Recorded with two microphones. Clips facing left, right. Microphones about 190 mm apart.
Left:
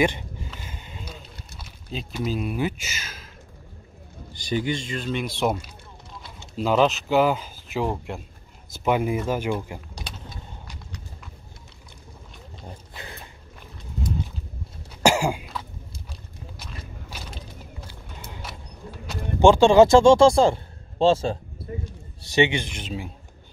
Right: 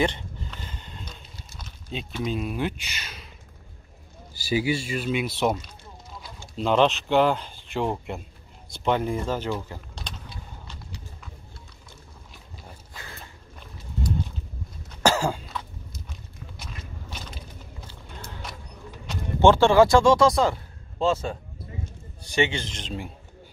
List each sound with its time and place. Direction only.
0.0 s a sound: 10° left (ahead or behind)
1.6 s speech: 5° left (ahead or behind)
12.9 s dog: 20° left (ahead or behind)
15.0 s cough: 10° left (ahead or behind)
16.5 s walk: 5° left (ahead or behind)
17.8 s a sound: 10° left (ahead or behind)
19.4 s speech: 15° left (ahead or behind)
22.3 s speech: 20° left (ahead or behind); by 23.1 s centre (ahead or behind)